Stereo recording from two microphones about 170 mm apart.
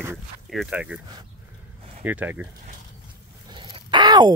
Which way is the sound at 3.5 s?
30° right (ahead or behind).